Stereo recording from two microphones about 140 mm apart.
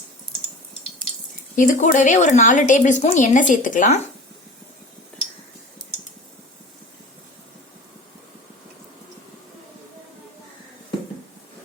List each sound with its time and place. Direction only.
1.5 s speech: 65° left (ahead or behind)